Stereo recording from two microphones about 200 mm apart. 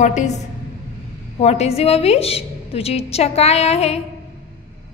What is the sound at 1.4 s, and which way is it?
A woman's voice, 30° left (ahead or behind).